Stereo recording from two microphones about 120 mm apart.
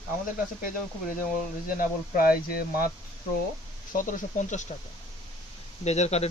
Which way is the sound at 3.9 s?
90° left.